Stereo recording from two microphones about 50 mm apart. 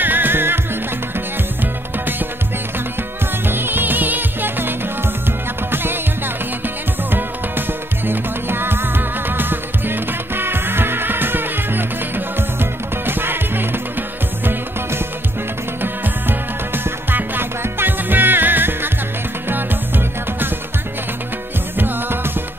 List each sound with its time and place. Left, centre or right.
0.0 s music: right
1.6 s music: right
3.4 s music: right
21.7 s music: right